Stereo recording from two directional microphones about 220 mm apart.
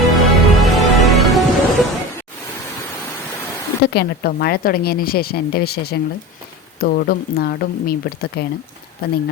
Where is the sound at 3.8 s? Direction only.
45° left (ahead or behind).